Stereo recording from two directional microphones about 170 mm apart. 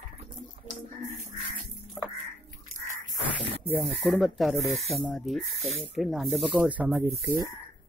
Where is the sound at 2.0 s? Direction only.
5° right (ahead or behind).